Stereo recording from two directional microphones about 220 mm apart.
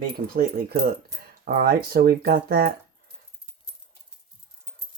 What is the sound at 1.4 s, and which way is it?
Cutlery, 40° right (ahead or behind).